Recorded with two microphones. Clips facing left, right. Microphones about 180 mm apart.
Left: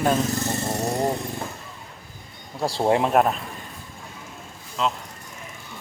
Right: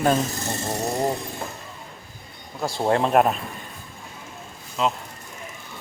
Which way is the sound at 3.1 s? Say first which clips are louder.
Right 1 dB; 5° right (ahead or behind).